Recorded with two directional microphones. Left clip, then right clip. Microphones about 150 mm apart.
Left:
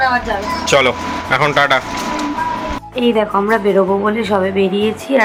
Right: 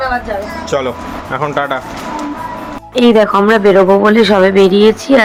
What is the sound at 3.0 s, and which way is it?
Speech, 40° right (ahead or behind).